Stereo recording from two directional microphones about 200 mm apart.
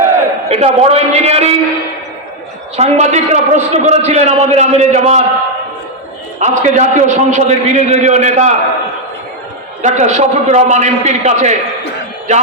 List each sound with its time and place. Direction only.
0.4 s a man's voice: 30° right (ahead or behind)
2.7 s a man's voice: 35° right (ahead or behind)
6.4 s a man's voice: 35° right (ahead or behind)
9.8 s a man's voice: 35° right (ahead or behind)